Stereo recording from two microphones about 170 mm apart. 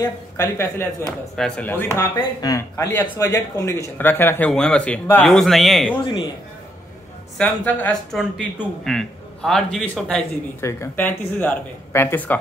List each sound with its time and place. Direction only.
0.0 s a man's voice: 15° left (ahead or behind)
7.3 s a man's voice: 10° left (ahead or behind)